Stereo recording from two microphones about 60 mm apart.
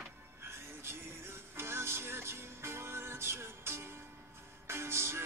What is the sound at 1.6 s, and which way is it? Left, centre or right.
Music, right.